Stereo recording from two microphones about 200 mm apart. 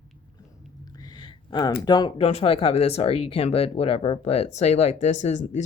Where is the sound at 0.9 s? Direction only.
20° left (ahead or behind).